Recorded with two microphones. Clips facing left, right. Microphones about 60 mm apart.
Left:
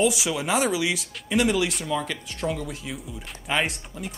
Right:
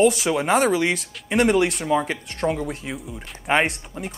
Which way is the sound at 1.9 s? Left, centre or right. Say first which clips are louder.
Right 6 dB; right.